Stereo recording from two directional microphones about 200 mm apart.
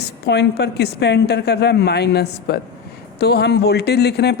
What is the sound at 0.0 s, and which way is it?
A woman's voice, 55° left (ahead or behind).